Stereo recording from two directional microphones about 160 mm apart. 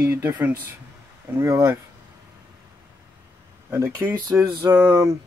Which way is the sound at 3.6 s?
15° right (ahead or behind).